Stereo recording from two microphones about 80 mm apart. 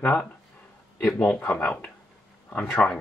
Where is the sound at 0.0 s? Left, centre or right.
Centre.